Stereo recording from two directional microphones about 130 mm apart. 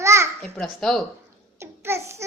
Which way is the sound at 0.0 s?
20° right (ahead or behind).